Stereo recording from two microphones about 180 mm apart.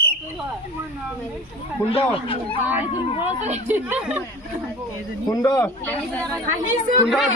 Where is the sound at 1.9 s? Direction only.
30° left (ahead or behind).